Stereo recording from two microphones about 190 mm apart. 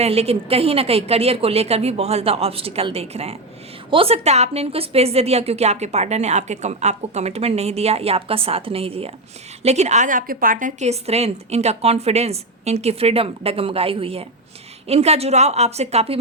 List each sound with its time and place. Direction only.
0.0 s a woman's voice: 35° right (ahead or behind)